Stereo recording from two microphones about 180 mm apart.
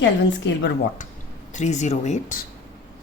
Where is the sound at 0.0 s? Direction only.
85° left.